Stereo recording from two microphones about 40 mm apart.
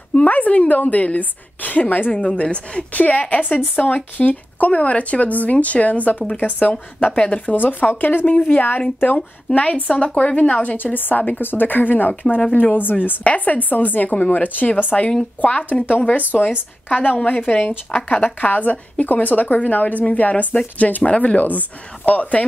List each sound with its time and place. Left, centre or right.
0.1 s a sound: left
0.7 s speech: left
2.1 s speech: left
7.5 s speech: left
8.4 s speech: left
10.8 s speech: left
11.4 s speech: left
12.1 s speech: left
12.5 s speech: left
13.2 s speech: left
16.2 s speech: left
21.0 s speech: left
21.4 s speech: left